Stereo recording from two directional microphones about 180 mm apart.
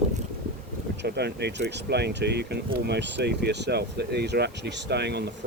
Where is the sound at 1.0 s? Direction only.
65° right (ahead or behind).